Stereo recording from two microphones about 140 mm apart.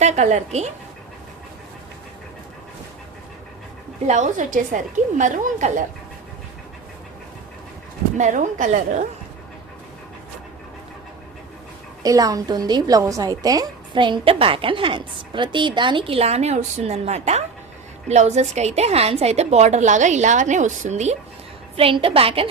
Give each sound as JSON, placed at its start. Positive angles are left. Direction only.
{"t": 0.0, "sound": "a woman's voice", "side_deg": -55}
{"t": 4.0, "sound": "a woman's voice", "side_deg": -55}
{"t": 8.2, "sound": "a woman's voice", "side_deg": -65}
{"t": 12.0, "sound": "a woman's voice", "side_deg": -25}
{"t": 21.8, "sound": "a woman's voice", "side_deg": -40}